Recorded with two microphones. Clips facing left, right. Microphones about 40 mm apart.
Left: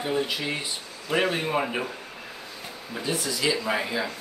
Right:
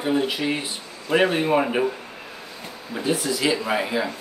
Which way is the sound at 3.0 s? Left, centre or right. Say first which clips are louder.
Right 5 dB; right.